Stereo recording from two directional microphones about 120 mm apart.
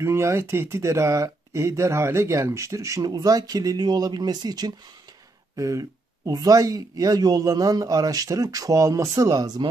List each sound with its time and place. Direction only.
0.0 s speech: 20° right (ahead or behind)